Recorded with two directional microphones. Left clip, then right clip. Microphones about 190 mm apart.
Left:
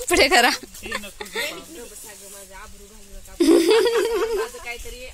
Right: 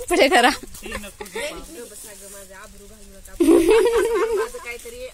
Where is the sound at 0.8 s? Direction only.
10° right (ahead or behind).